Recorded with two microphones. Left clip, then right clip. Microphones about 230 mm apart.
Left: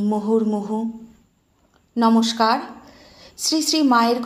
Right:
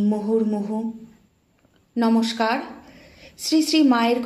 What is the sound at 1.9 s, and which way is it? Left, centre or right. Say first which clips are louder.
A woman's voice: left 3 dB; left.